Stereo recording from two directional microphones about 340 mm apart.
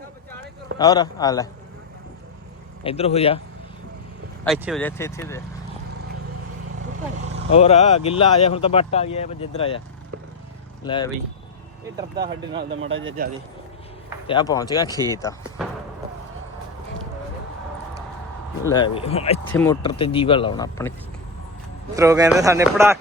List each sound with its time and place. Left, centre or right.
0.8 s speech: centre
2.8 s speech: centre
4.4 s speech: centre
7.5 s speech: centre
10.8 s speech: centre
11.9 s speech: centre
12.5 s speech: right
14.3 s speech: centre
15.6 s a sound: centre
18.7 s speech: centre
21.9 s speech: centre